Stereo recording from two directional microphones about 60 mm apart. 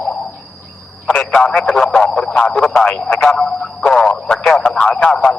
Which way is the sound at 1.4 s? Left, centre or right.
Centre.